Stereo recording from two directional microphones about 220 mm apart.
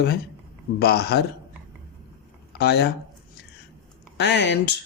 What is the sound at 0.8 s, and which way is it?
Speech, 45° left (ahead or behind).